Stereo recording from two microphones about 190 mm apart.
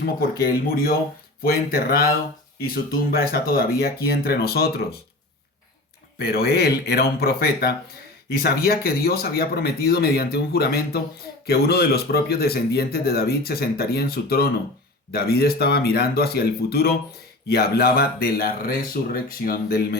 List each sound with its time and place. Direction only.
0.0 s speech: 50° left (ahead or behind)
6.1 s speech: 55° left (ahead or behind)